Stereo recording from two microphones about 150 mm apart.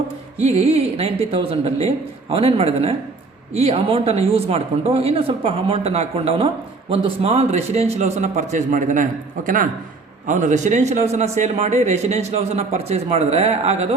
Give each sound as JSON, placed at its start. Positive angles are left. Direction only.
{"t": 0.4, "sound": "a man's voice", "side_deg": -45}